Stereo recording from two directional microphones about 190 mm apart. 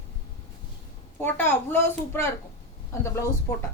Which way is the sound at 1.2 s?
10° left (ahead or behind).